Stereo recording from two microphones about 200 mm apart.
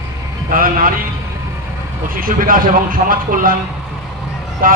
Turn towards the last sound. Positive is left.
turn(degrees=-45)  # may be behind; listen again after turning